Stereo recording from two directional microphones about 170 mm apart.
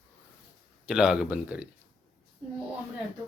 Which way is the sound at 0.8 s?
5° right (ahead or behind).